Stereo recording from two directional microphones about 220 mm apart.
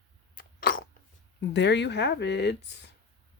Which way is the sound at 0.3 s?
40° left (ahead or behind).